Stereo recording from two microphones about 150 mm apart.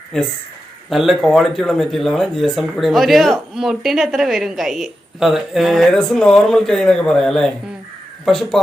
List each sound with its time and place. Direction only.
0.1 s speech: 5° left (ahead or behind)